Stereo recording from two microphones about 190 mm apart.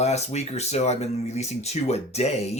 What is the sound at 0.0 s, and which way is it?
Speech, 35° left (ahead or behind).